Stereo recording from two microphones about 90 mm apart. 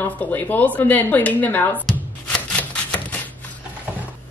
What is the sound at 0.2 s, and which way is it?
A woman's voice, 20° left (ahead or behind).